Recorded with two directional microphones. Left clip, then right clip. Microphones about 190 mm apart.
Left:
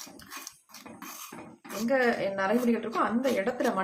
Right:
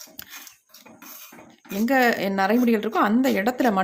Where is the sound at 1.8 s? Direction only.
60° right (ahead or behind).